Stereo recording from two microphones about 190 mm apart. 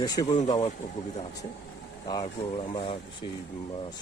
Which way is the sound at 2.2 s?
30° left (ahead or behind).